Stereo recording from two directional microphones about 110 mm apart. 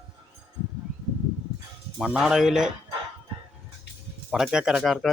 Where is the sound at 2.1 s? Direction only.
5° right (ahead or behind).